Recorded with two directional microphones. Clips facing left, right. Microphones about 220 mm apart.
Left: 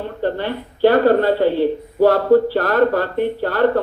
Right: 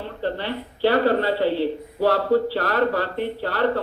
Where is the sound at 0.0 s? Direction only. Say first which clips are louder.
Left 5 dB; 50° left (ahead or behind).